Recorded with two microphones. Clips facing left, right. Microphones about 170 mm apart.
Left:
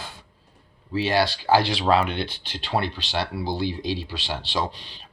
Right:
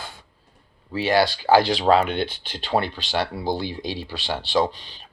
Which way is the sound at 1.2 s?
45° right (ahead or behind).